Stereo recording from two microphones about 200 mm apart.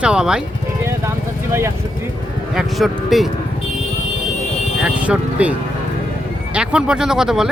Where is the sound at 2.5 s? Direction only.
Centre (ahead or behind).